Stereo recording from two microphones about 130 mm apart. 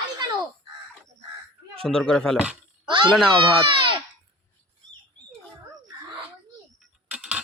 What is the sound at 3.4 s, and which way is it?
Speech, 40° right (ahead or behind).